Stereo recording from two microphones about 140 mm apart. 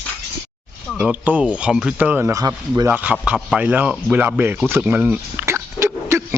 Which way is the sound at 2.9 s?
10° right (ahead or behind).